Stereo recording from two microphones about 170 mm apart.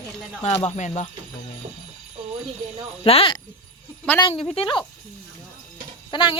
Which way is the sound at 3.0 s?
35° left (ahead or behind).